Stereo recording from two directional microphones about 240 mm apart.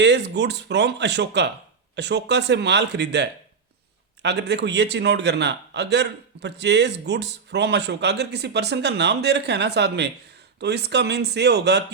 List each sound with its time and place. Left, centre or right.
0.0 s a man's voice: right